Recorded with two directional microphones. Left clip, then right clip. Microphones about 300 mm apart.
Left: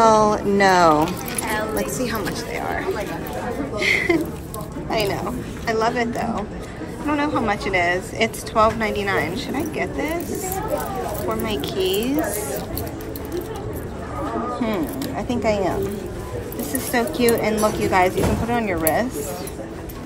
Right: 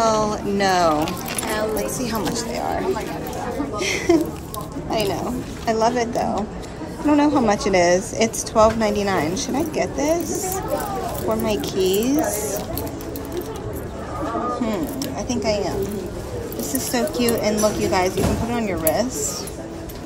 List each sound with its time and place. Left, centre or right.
0.0 s a woman's voice: centre
11.2 s a woman's voice: centre
14.6 s speech: centre
16.7 s a woman's voice: centre